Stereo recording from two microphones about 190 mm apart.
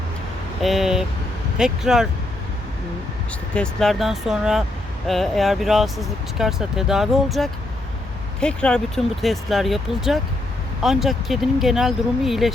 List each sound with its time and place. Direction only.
0.6 s vehicle: centre (ahead or behind)
1.5 s speech: 5° right (ahead or behind)
3.5 s speech: 5° left (ahead or behind)